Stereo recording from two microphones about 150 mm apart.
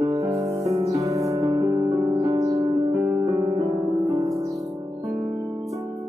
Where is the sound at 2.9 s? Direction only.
15° right (ahead or behind).